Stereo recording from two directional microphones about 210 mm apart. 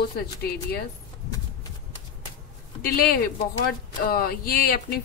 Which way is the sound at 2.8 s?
45° left (ahead or behind).